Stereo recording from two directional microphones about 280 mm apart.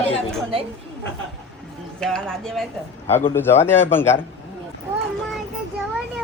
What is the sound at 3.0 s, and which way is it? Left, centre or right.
Speech, left.